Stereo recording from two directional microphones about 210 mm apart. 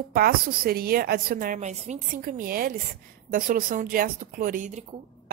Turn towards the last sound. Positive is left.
turn(degrees=-35)  # may be behind; listen again after turning